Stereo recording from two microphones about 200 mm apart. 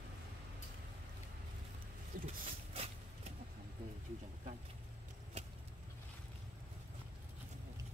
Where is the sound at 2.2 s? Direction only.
30° right (ahead or behind).